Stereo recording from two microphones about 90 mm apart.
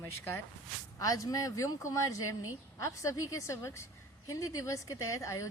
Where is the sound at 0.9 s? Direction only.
40° left (ahead or behind).